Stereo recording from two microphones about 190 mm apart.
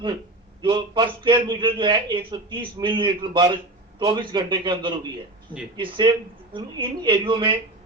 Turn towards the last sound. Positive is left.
turn(degrees=-25)  # may be behind; listen again after turning